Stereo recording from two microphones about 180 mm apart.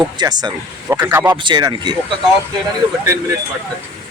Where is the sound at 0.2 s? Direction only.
25° right (ahead or behind).